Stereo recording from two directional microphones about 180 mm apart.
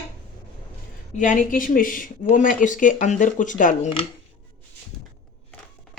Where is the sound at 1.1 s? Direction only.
45° left (ahead or behind).